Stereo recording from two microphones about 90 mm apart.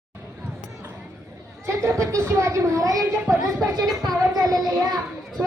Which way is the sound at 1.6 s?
30° right (ahead or behind).